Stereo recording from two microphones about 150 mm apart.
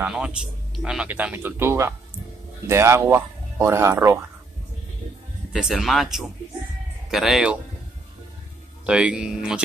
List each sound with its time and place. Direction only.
0.0 s speech: 5° right (ahead or behind)
5.5 s speech: centre (ahead or behind)
8.8 s speech: 5° right (ahead or behind)